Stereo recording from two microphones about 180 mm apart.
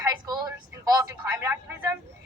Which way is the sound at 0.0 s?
20° right (ahead or behind).